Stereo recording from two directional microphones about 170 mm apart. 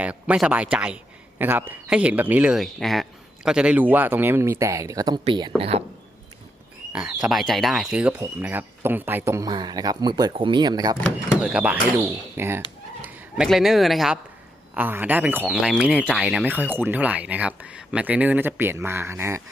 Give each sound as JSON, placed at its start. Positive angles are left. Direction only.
{"t": 0.0, "sound": "speech", "side_deg": -5}
{"t": 7.1, "sound": "speech", "side_deg": -5}
{"t": 11.0, "sound": "speech", "side_deg": -5}